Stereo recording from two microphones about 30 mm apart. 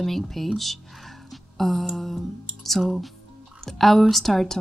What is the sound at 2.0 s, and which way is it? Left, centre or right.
Music, centre.